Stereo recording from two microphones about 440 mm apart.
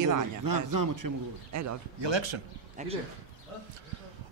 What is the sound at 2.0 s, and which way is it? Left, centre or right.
Speech, right.